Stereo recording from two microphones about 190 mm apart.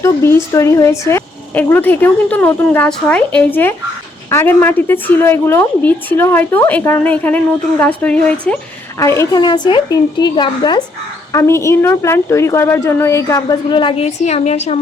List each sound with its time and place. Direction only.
0.0 s a woman's voice: 15° left (ahead or behind); by 14.8 s 35° left (ahead or behind)